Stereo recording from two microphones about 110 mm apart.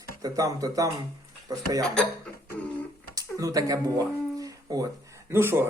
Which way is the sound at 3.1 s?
35° right (ahead or behind).